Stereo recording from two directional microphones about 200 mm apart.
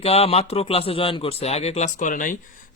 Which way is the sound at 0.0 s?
30° left (ahead or behind).